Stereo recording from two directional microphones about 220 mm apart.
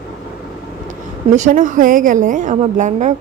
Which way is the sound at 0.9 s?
35° right (ahead or behind).